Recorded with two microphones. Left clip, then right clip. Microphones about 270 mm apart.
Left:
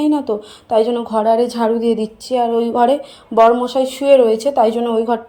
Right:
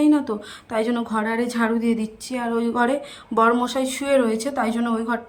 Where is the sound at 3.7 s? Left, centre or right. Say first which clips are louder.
Left 9 dB; centre.